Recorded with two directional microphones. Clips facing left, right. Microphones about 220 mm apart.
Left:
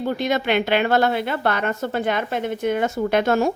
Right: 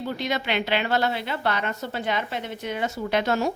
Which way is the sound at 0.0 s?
50° left (ahead or behind).